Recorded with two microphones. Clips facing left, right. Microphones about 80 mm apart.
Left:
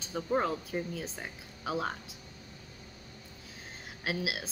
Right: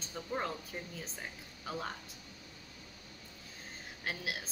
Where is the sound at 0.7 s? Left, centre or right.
Left.